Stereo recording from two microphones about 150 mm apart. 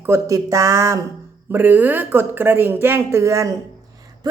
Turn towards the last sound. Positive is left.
turn(degrees=-25)  # may be behind; listen again after turning